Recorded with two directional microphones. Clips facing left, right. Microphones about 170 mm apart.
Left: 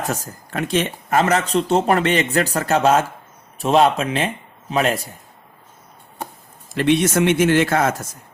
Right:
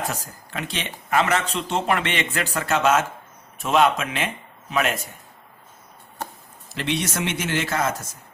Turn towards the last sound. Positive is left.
turn(degrees=55)  # may be behind; listen again after turning